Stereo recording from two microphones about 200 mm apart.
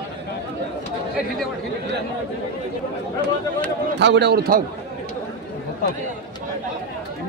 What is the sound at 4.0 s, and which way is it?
Speech, 60° right (ahead or behind).